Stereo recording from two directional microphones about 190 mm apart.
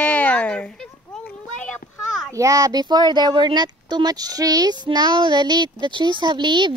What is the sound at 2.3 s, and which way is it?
Speech, 15° right (ahead or behind).